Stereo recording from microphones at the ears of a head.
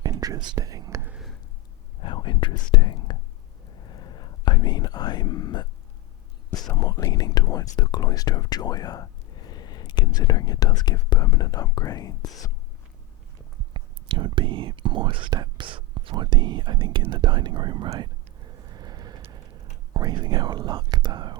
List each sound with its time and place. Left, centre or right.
0.0 s whispering: right
2.0 s speech: left
3.7 s whispering: left
6.5 s speech: left
13.6 s speech: right